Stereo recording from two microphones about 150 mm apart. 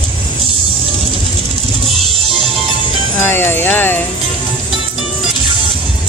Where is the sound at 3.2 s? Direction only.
15° left (ahead or behind).